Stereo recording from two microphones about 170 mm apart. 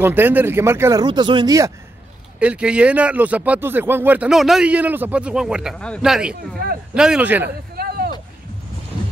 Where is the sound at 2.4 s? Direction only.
5° right (ahead or behind).